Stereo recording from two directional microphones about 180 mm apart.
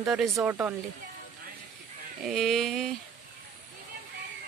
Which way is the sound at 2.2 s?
Centre (ahead or behind).